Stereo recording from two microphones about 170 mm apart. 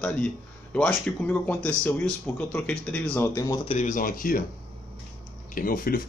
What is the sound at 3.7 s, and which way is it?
Speech, 45° left (ahead or behind).